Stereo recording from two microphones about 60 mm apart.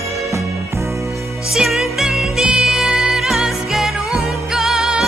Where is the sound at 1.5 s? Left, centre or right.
Centre.